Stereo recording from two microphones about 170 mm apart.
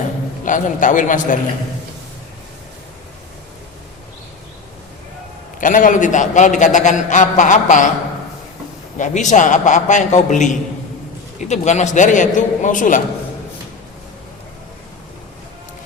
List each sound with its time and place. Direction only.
0.4 s a man's voice: 50° left (ahead or behind)
5.5 s a man's voice: 50° left (ahead or behind)
9.0 s a man's voice: 45° left (ahead or behind)